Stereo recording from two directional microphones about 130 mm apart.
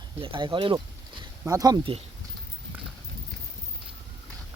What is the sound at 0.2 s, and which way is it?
Speech, 40° right (ahead or behind).